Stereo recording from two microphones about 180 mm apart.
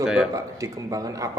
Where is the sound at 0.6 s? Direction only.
20° right (ahead or behind).